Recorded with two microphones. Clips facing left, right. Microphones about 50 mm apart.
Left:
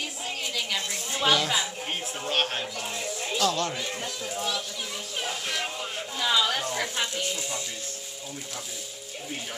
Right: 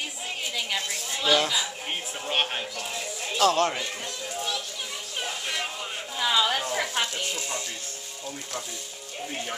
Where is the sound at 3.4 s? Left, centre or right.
Right.